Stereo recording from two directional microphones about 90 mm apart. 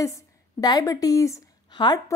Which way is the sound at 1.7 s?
55° left (ahead or behind).